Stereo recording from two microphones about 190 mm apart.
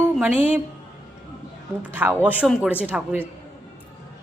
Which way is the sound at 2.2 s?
10° right (ahead or behind).